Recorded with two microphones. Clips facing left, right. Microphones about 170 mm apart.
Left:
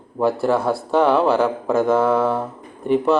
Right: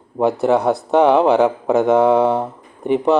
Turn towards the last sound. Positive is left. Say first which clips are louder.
# right 2 dB
turn(degrees=-20)  # may be behind; listen again after turning